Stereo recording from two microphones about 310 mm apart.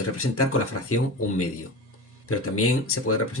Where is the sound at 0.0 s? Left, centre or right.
Left.